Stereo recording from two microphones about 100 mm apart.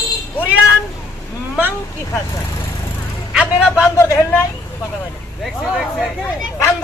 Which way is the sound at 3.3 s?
5° right (ahead or behind).